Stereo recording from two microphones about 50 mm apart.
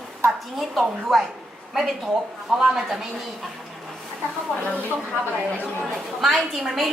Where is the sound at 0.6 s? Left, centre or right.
Centre.